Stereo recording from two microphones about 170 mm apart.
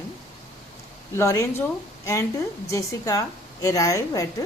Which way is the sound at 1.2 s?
15° left (ahead or behind).